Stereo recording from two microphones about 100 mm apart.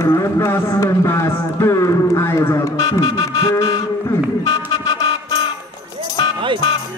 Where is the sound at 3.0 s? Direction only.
45° left (ahead or behind).